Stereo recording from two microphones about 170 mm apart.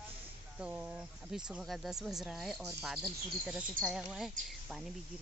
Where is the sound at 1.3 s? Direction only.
Centre (ahead or behind).